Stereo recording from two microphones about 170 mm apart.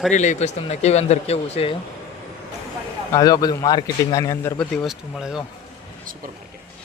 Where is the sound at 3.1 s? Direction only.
25° left (ahead or behind).